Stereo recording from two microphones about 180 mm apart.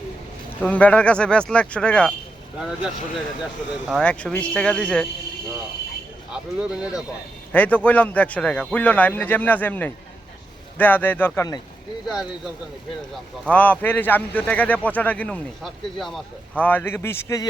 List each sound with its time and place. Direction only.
0.6 s speech: 10° left (ahead or behind)
3.8 s speech: 5° left (ahead or behind)
6.3 s speech: 5° right (ahead or behind)
7.5 s speech: 10° left (ahead or behind)
11.3 s speech: 20° left (ahead or behind)
13.4 s speech: 10° left (ahead or behind)